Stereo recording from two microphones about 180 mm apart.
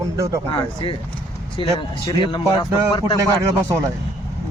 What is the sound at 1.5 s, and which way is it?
Speech, 25° left (ahead or behind).